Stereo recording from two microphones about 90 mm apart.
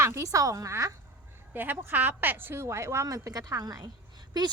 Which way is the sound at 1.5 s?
20° right (ahead or behind).